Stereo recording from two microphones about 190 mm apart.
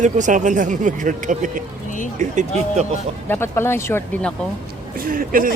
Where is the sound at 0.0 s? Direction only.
40° right (ahead or behind).